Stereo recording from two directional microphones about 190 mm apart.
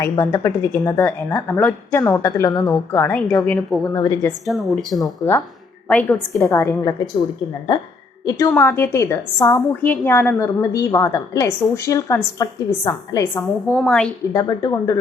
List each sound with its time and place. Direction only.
0.0 s speech: 15° left (ahead or behind)
3.9 s speech: 15° left (ahead or behind)
4.4 s speech: centre (ahead or behind)
8.2 s speech: 20° left (ahead or behind)
13.7 s speech: centre (ahead or behind)
14.3 s speech: 20° left (ahead or behind)